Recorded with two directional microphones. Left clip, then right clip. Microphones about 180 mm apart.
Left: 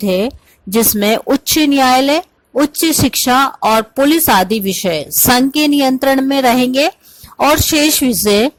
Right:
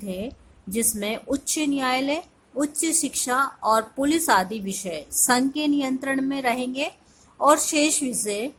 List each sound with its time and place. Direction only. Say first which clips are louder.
0.0 s a woman's voice: left 17 dB; 45° left (ahead or behind)